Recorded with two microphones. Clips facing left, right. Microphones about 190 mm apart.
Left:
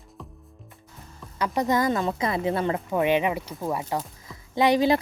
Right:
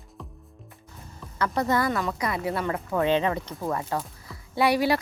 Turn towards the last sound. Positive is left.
turn(degrees=20)  # may be behind; listen again after turning